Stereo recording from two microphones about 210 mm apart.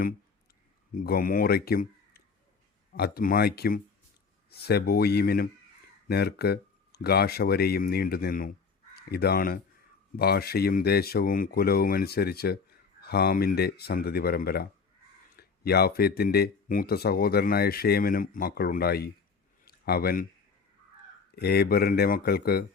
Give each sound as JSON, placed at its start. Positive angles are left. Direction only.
{"t": 0.9, "sound": "speech", "side_deg": 45}
{"t": 19.6, "sound": "a sound", "side_deg": 45}
{"t": 21.3, "sound": "speech", "side_deg": 50}